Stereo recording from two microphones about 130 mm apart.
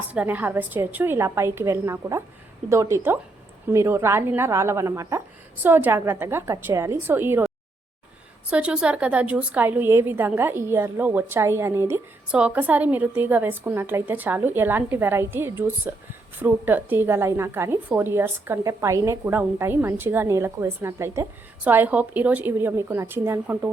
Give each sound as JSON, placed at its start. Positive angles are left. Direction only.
{"t": 0.1, "sound": "a woman's voice", "side_deg": -10}
{"t": 8.4, "sound": "a woman's voice", "side_deg": -10}